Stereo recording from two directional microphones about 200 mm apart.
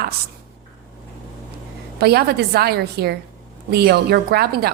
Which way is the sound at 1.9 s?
55° right (ahead or behind).